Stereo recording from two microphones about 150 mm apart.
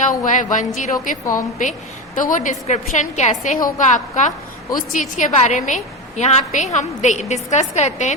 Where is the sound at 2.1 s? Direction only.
60° left (ahead or behind).